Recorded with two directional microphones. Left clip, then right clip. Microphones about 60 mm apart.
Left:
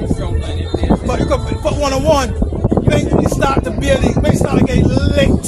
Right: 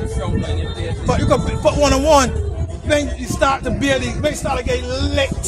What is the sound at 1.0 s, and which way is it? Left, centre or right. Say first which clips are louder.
Speech: even; right.